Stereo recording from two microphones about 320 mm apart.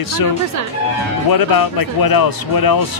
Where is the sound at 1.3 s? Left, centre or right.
Left.